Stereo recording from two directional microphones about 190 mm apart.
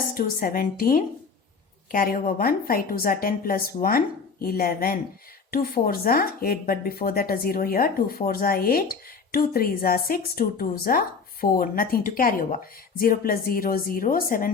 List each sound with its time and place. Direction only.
0.1 s speech: 50° left (ahead or behind)